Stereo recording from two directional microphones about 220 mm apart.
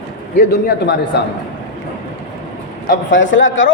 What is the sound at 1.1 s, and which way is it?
Speech, 45° left (ahead or behind).